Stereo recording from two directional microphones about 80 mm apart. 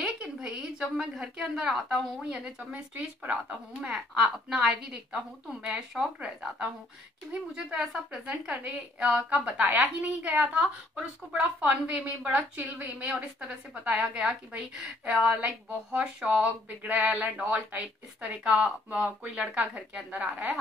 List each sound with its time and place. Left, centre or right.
0.0 s a woman's voice: centre